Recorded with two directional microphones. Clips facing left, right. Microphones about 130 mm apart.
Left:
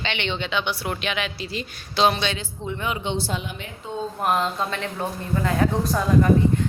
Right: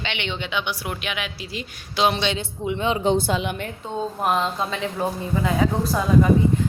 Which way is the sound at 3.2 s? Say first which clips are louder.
Right 6 dB; 60° right (ahead or behind).